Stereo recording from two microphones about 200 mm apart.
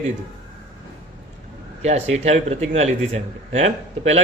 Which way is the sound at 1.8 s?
35° right (ahead or behind).